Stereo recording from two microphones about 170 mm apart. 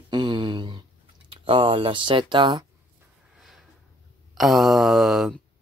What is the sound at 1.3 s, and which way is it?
Speech, 30° right (ahead or behind).